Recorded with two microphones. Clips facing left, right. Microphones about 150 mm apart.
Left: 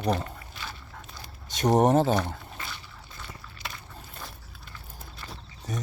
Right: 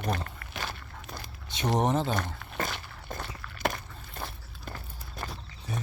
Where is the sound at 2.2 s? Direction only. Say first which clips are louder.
Left 2 dB; 50° right (ahead or behind).